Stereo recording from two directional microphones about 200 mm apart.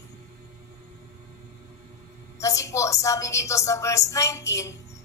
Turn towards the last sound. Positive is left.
turn(degrees=15)  # may be behind; listen again after turning